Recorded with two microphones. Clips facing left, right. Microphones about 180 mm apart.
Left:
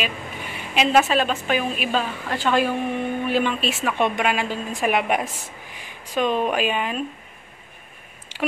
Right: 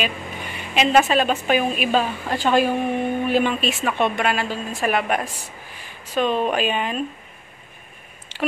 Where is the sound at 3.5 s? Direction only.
5° left (ahead or behind).